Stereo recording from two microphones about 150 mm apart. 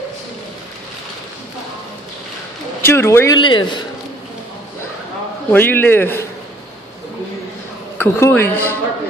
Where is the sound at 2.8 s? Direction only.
15° left (ahead or behind).